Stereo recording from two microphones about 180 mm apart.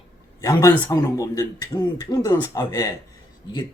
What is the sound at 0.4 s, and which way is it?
Speech, 20° left (ahead or behind).